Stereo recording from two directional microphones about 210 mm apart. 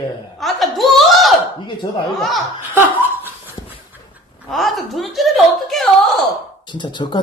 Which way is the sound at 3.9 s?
5° right (ahead or behind).